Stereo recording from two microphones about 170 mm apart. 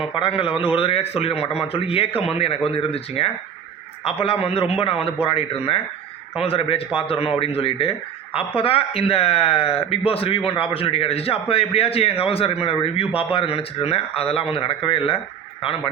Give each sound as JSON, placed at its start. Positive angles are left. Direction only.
{"t": 0.2, "sound": "a man's voice", "side_deg": 30}